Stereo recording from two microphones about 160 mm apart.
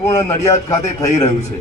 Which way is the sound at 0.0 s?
20° left (ahead or behind).